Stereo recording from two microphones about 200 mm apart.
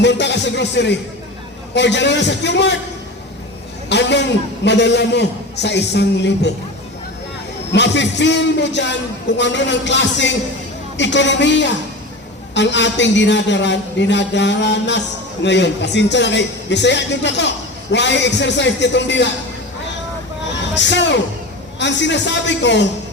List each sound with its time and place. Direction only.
0.0 s a man's voice: 60° left (ahead or behind)
3.8 s a man's voice: 60° left (ahead or behind)
7.7 s a man's voice: 60° left (ahead or behind)
20.4 s vehicle: 60° left (ahead or behind)
21.8 s a man's voice: 60° left (ahead or behind)